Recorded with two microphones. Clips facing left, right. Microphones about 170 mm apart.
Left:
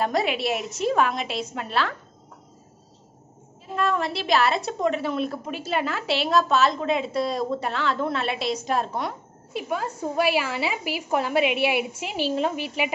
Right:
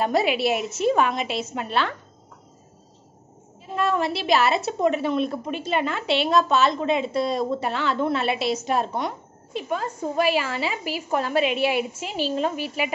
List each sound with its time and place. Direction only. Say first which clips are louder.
0.0 s a woman's voice: right 3 dB; 5° right (ahead or behind)
3.7 s a woman's voice: right 1 dB; centre (ahead or behind); by 12.9 s 15° left (ahead or behind)